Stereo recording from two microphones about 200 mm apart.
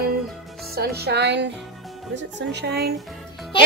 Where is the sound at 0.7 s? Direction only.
50° right (ahead or behind).